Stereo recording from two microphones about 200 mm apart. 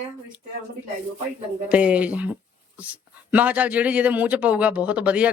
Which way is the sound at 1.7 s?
5° right (ahead or behind).